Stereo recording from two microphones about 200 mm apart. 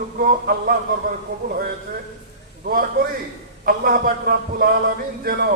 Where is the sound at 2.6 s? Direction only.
45° right (ahead or behind).